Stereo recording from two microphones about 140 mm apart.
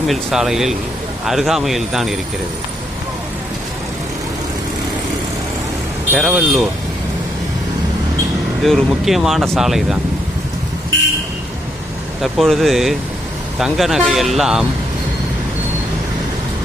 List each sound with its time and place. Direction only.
0.1 s speech: centre (ahead or behind)
6.1 s speech: 5° right (ahead or behind)
8.6 s speech: centre (ahead or behind)
12.2 s speech: centre (ahead or behind)